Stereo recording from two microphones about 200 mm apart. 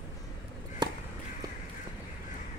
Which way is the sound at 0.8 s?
20° right (ahead or behind).